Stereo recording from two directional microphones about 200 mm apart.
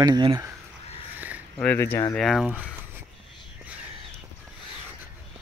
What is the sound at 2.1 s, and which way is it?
Speech, centre (ahead or behind).